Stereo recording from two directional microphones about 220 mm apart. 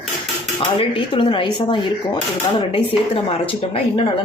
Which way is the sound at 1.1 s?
20° left (ahead or behind).